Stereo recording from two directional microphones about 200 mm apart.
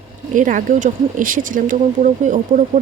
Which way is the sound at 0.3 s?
40° right (ahead or behind).